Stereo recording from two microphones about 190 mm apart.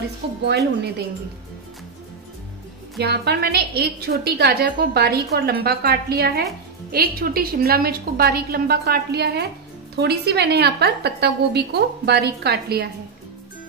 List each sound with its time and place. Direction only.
0.2 s speech: 65° right (ahead or behind)
3.0 s a woman's voice: 60° right (ahead or behind)